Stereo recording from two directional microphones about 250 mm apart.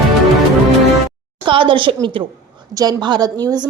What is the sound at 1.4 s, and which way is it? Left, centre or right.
A woman's voice, right.